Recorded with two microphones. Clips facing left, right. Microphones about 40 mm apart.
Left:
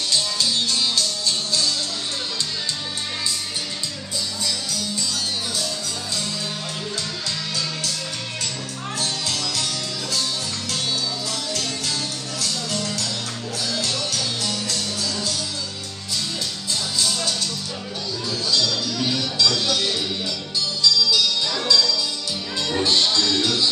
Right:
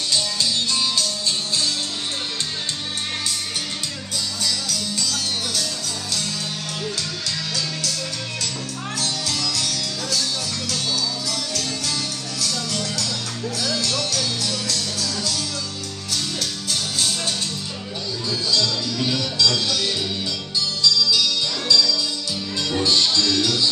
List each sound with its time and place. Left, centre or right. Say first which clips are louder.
0.1 s music: even; centre
4.4 s music: right 3 dB; right
8.9 s music: even; centre
11.2 s music: even; centre
13.6 s music: right 1 dB; left
16.1 s music: right 1 dB; right
16.7 s music: left 1 dB; right
18.5 s music: even; centre